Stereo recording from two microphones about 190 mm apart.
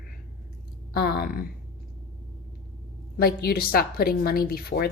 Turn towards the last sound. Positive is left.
turn(degrees=55)  # may be behind; listen again after turning